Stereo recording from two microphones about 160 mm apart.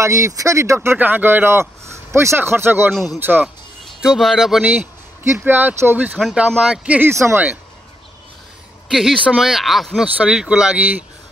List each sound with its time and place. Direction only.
0.0 s speech: 20° right (ahead or behind)
8.9 s speech: 5° right (ahead or behind)